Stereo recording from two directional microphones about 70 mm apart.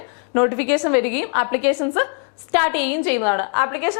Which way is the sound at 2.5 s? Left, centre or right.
Centre.